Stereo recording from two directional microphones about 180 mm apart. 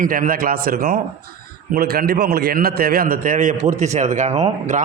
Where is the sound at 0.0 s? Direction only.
50° right (ahead or behind).